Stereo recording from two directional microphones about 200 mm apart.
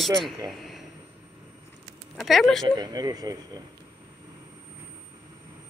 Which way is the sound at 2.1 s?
Centre (ahead or behind).